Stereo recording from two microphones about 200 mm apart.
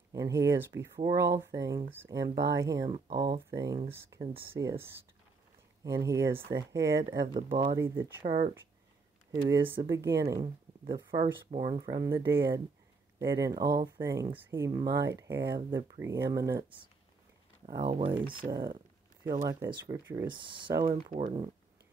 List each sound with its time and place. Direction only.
0.1 s speech: 15° right (ahead or behind)
5.9 s speech: 15° right (ahead or behind)
7.3 s speech: 35° right (ahead or behind)
7.7 s speech: 15° right (ahead or behind)
8.2 s speech: 30° right (ahead or behind)
9.4 s speech: 10° right (ahead or behind)
17.7 s speech: 25° right (ahead or behind)
20.9 s speech: 35° right (ahead or behind)